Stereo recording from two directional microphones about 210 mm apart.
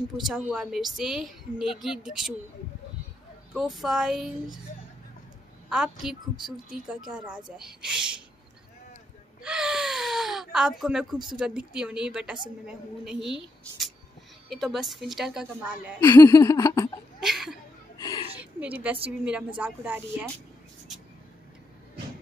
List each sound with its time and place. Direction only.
0.2 s a woman's voice: 5° right (ahead or behind)
3.5 s a woman's voice: centre (ahead or behind)
5.7 s a woman's voice: 5° right (ahead or behind)
9.4 s gasp: 5° right (ahead or behind)
11.2 s a woman's voice: 5° right (ahead or behind)
16.0 s laughter: 20° left (ahead or behind)
17.2 s a woman's voice: centre (ahead or behind)
17.9 s a sound: 20° left (ahead or behind)
18.4 s a sound: 5° right (ahead or behind)
19.0 s a woman's voice: 5° right (ahead or behind)